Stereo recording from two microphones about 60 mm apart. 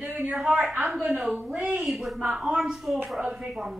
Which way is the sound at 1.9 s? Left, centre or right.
Centre.